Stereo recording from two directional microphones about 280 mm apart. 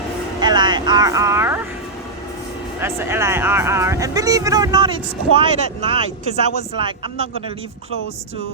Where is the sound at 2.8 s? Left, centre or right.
Centre.